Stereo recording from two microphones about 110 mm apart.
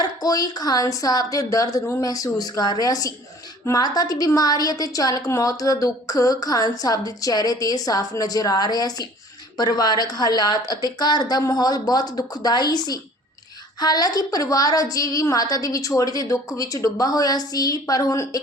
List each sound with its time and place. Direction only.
0.0 s a woman's voice: 35° left (ahead or behind)